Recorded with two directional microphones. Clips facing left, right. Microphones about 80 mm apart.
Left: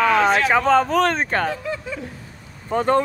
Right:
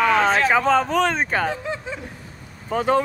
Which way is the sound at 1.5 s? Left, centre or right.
Right.